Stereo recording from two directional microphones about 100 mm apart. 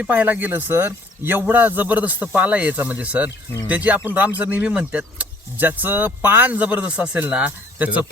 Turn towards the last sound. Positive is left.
turn(degrees=-15)  # may be behind; listen again after turning